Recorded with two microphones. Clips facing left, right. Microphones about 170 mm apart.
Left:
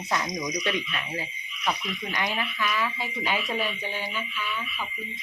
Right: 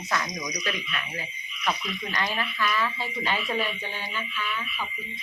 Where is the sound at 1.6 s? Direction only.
10° left (ahead or behind).